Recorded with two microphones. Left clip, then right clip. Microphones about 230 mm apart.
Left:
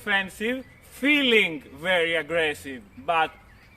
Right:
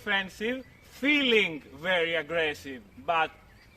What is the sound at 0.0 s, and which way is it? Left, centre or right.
Speech, centre.